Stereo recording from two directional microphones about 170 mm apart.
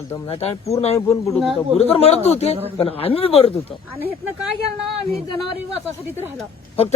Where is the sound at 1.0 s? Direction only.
20° left (ahead or behind).